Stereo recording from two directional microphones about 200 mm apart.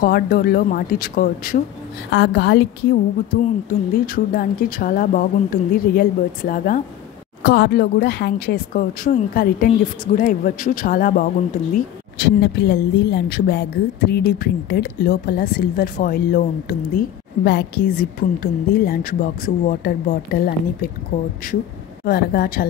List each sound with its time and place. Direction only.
0.0 s a woman's voice: 50° left (ahead or behind)
2.0 s a woman's voice: 55° left (ahead or behind)
3.3 s a woman's voice: 45° left (ahead or behind)
12.2 s a woman's voice: 55° left (ahead or behind)
22.0 s a woman's voice: 50° left (ahead or behind)